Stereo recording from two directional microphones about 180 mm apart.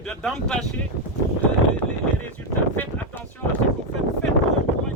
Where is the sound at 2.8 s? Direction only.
10° left (ahead or behind).